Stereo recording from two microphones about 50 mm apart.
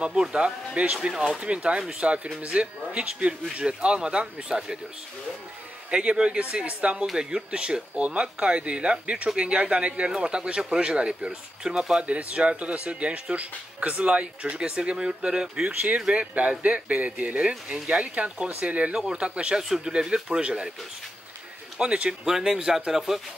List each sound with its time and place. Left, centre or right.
0.0 s speech: centre
1.4 s speech: right
5.9 s speech: centre
21.7 s speech: right
22.2 s speech: centre